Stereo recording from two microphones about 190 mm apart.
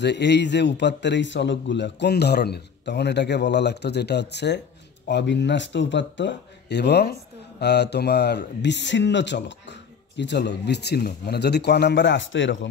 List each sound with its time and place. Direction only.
0.0 s speech: 65° left (ahead or behind)